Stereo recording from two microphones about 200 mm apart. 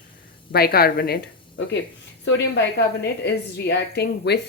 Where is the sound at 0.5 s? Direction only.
50° left (ahead or behind).